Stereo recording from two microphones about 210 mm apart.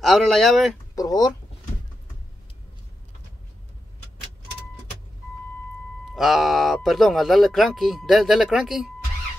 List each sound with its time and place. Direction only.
0.0 s speech: centre (ahead or behind)
0.9 s speech: 15° left (ahead or behind)
6.1 s speech: centre (ahead or behind)